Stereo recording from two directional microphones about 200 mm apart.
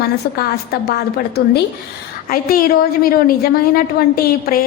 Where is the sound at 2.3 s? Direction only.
45° left (ahead or behind).